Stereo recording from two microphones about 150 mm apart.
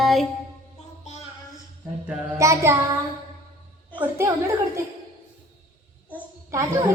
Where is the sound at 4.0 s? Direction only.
15° right (ahead or behind).